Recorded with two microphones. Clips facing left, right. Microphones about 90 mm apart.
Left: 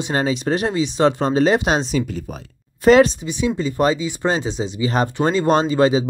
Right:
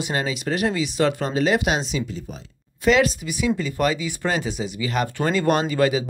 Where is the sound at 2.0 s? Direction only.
55° left (ahead or behind).